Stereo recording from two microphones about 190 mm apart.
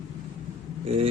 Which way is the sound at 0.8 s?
30° right (ahead or behind).